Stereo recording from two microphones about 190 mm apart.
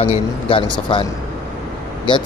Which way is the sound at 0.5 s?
25° left (ahead or behind).